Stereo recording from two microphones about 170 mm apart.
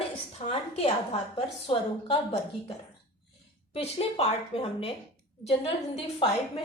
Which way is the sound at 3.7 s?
35° left (ahead or behind).